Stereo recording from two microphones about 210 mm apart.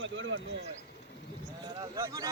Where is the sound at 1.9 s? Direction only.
15° right (ahead or behind).